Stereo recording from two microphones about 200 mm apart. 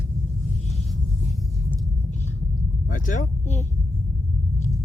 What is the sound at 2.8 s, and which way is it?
Speech, 40° left (ahead or behind).